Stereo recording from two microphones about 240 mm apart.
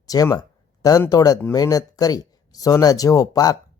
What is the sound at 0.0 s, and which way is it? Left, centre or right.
Speech, centre.